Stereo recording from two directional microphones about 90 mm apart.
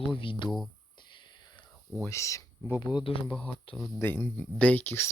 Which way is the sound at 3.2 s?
10° left (ahead or behind).